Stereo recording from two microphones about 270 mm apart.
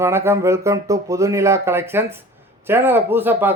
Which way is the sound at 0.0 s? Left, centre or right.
Centre.